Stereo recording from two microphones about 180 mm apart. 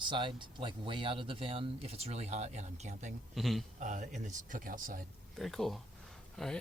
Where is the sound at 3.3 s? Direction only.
Centre (ahead or behind).